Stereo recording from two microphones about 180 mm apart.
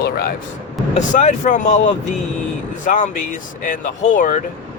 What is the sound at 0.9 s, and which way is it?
Speech, 40° left (ahead or behind).